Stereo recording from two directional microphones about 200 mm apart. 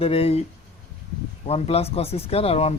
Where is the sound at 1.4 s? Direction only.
30° left (ahead or behind).